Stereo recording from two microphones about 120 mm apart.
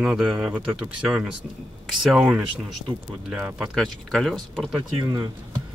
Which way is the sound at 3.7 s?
5° left (ahead or behind).